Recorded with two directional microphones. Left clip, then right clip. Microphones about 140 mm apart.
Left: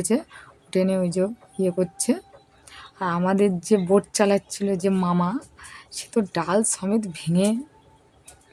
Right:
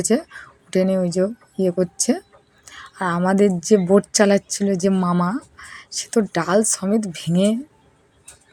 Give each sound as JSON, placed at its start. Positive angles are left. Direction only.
{"t": 0.0, "sound": "a woman's voice", "side_deg": -15}